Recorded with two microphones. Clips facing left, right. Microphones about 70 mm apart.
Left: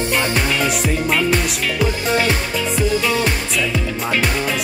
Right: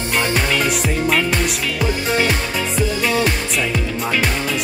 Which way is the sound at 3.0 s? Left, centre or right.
Right.